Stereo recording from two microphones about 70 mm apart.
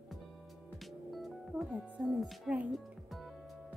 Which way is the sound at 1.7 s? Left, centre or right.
Right.